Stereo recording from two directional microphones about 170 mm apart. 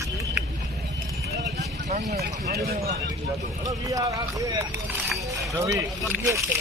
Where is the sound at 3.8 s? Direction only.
20° right (ahead or behind).